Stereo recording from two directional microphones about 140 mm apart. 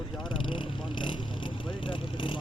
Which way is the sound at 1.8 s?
35° left (ahead or behind).